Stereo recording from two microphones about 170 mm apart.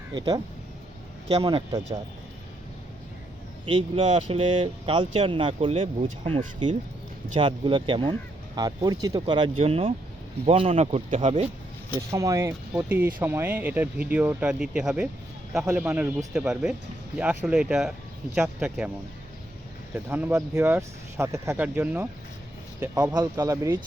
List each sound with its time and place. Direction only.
0.1 s speech: 25° right (ahead or behind)
3.7 s speech: 30° right (ahead or behind)
11.9 s speech: 20° right (ahead or behind)
20.1 s speech: 10° right (ahead or behind)
23.0 s speech: 20° right (ahead or behind)